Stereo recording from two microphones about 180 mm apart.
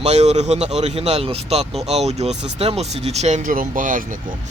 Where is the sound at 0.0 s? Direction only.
35° right (ahead or behind).